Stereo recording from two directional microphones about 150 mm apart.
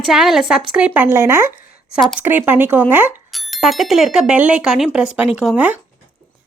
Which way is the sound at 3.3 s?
Centre (ahead or behind).